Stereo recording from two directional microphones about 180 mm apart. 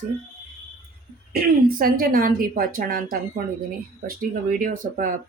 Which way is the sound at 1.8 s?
55° right (ahead or behind).